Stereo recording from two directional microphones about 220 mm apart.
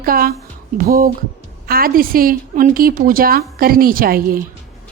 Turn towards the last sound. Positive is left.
turn(degrees=-40)  # may be behind; listen again after turning